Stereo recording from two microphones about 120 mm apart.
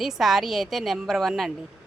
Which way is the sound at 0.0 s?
Centre (ahead or behind).